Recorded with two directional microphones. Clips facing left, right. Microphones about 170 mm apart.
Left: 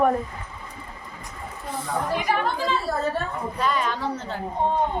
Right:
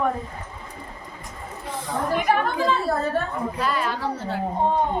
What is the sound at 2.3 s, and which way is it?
Speech, 55° right (ahead or behind).